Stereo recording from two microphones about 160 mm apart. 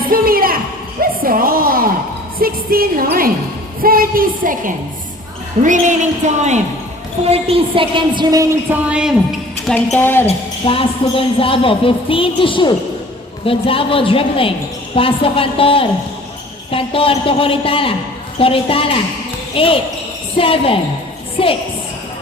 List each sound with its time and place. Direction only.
0.1 s a sound: 65° right (ahead or behind)
2.4 s a woman's voice: 65° right (ahead or behind); by 8.4 s 25° right (ahead or behind)
8.7 s a woman's voice: 5° right (ahead or behind)
10.0 s speech: 15° left (ahead or behind)
10.2 s a woman's voice: 35° left (ahead or behind)